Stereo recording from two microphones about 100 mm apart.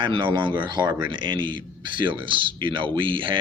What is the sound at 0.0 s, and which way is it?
A man's voice, 55° right (ahead or behind).